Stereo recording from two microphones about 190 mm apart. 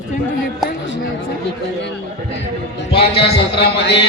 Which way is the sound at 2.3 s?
70° left (ahead or behind).